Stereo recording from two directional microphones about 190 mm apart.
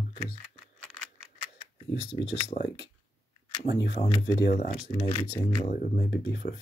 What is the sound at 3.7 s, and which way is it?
Speech, 60° left (ahead or behind).